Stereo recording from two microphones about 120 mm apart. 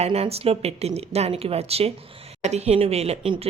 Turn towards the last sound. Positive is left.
turn(degrees=-55)  # may be behind; listen again after turning